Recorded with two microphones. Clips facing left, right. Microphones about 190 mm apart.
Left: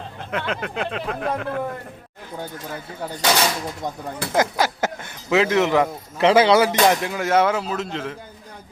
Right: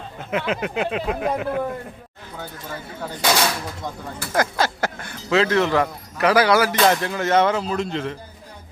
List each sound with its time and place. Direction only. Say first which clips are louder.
0.3 s speech: right 3 dB; 5° right (ahead or behind)
3.2 s speech: even; 10° left (ahead or behind)